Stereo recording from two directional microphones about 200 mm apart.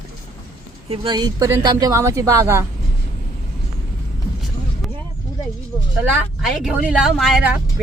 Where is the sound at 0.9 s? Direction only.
20° right (ahead or behind).